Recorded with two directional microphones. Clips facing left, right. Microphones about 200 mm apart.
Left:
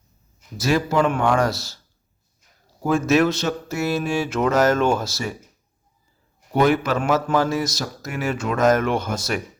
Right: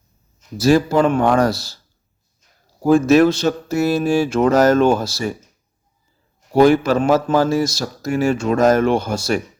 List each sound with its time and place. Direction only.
0.6 s speech: 35° right (ahead or behind)
2.8 s speech: 35° right (ahead or behind)
6.6 s speech: 30° right (ahead or behind)